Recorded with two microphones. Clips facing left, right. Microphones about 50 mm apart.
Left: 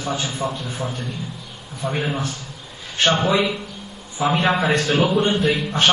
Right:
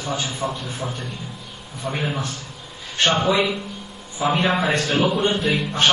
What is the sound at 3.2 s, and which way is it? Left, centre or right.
Speech, centre.